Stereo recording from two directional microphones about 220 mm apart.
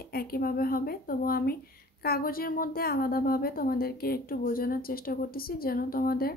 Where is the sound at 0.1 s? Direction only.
45° left (ahead or behind).